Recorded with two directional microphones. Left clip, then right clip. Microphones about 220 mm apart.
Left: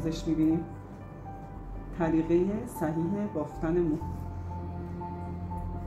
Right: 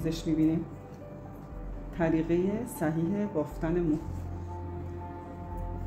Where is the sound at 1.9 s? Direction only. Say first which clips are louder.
Left 1 dB; 45° right (ahead or behind).